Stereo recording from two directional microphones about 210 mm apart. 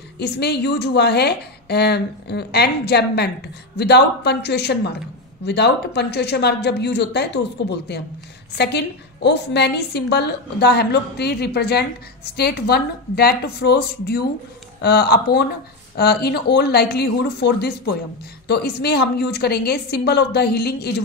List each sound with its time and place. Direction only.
0.2 s a woman's voice: 50° left (ahead or behind)